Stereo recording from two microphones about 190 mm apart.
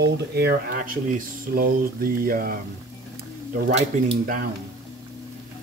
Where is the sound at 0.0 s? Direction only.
55° right (ahead or behind).